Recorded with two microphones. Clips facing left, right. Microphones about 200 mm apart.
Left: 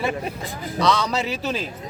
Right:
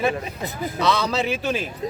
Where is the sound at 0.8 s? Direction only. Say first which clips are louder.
Left 1 dB; 5° right (ahead or behind).